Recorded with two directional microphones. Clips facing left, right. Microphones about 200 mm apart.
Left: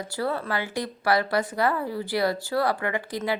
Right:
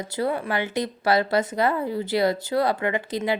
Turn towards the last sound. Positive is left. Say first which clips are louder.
# right 3 dB
turn(degrees=-25)  # may be behind; listen again after turning